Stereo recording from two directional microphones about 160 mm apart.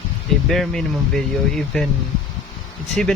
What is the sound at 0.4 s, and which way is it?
Speech, centre (ahead or behind).